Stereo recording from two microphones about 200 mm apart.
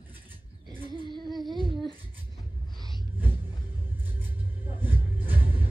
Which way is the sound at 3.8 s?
10° right (ahead or behind).